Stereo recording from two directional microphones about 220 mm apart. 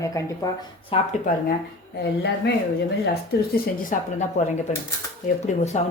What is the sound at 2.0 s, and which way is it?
Speech, 50° left (ahead or behind).